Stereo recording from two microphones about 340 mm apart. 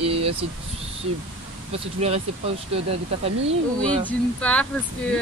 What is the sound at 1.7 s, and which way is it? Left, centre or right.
Speech, centre.